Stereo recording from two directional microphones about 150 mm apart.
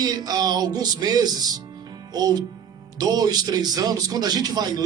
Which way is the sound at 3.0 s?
25° right (ahead or behind).